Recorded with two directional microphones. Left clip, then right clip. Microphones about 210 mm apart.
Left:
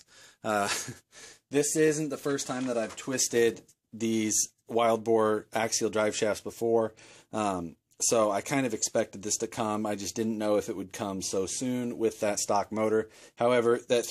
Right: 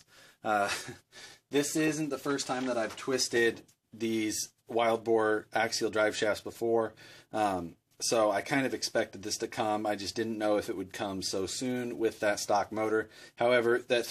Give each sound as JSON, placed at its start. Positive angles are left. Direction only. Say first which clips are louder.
{"t": 0.4, "sound": "speech", "louder": "left 1 dB", "side_deg": 45}